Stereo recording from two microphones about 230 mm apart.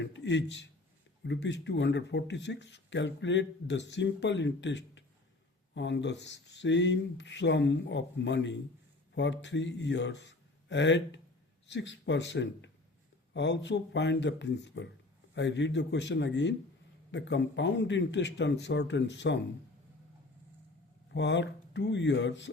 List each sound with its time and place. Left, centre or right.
0.0 s a man's voice: left
21.1 s speech: left